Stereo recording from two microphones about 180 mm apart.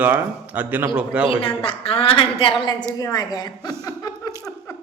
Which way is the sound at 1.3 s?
30° left (ahead or behind).